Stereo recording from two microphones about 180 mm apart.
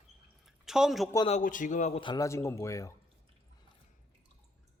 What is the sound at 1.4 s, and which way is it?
Speech, 45° left (ahead or behind).